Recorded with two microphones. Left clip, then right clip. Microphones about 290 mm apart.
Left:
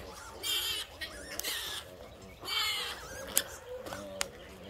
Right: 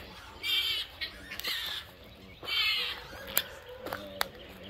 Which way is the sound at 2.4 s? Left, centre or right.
Left.